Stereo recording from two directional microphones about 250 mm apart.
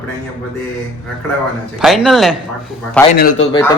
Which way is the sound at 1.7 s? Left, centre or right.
Centre.